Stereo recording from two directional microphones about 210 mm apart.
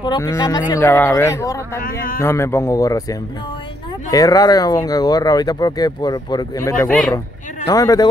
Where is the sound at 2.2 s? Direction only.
10° left (ahead or behind).